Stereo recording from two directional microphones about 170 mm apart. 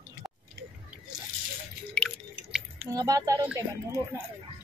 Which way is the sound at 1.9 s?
5° left (ahead or behind).